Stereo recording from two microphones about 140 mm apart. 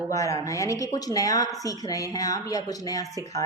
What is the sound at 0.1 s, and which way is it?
Speech, 20° left (ahead or behind).